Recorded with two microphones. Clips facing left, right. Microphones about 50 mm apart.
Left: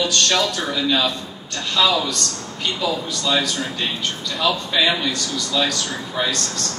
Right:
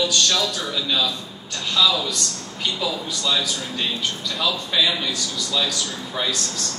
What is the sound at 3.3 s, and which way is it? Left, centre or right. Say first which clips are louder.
Speech: left 3 dB; left.